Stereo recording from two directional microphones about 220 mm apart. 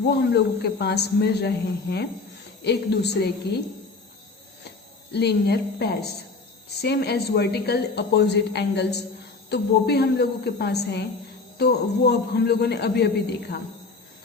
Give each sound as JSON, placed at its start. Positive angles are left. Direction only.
{"t": 0.1, "sound": "a woman's voice", "side_deg": 50}
{"t": 5.1, "sound": "a woman's voice", "side_deg": 50}